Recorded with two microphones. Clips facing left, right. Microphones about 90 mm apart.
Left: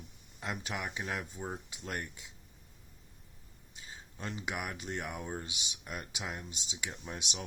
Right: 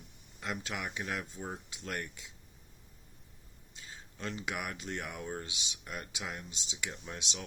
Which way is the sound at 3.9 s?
20° left (ahead or behind).